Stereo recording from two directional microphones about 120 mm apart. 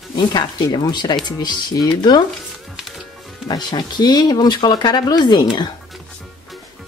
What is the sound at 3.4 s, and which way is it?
Speech, 40° left (ahead or behind).